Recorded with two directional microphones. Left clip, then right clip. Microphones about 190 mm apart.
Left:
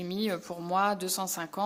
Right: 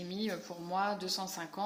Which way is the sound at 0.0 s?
40° left (ahead or behind).